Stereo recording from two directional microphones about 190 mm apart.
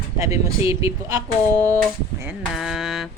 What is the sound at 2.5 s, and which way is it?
Mantra, centre (ahead or behind).